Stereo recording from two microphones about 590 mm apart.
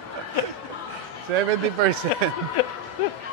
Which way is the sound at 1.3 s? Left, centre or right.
Right.